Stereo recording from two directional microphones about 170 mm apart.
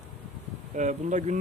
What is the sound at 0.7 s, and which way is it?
Speech, 45° right (ahead or behind).